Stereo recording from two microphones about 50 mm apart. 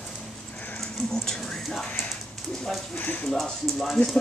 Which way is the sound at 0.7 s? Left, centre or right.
Centre.